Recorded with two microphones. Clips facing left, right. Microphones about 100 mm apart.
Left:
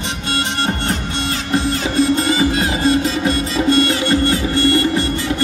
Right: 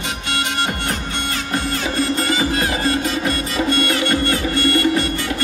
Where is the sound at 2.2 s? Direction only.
20° left (ahead or behind).